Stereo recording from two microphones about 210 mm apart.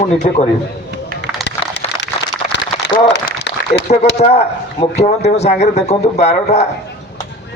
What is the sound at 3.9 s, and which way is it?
Speech, 30° left (ahead or behind).